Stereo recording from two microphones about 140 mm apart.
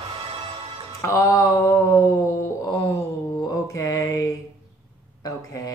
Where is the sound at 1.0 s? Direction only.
25° left (ahead or behind).